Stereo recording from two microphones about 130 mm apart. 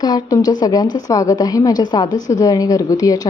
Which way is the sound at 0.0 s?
30° left (ahead or behind).